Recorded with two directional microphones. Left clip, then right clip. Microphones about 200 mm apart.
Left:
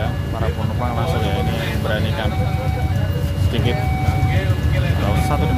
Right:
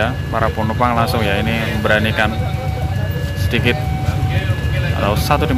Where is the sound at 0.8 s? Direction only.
25° right (ahead or behind).